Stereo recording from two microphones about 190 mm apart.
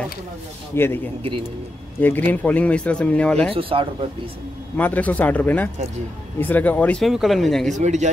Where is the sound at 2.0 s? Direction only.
10° left (ahead or behind).